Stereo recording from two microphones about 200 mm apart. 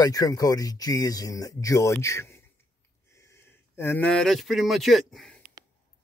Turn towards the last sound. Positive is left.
turn(degrees=0)  # may be behind; listen again after turning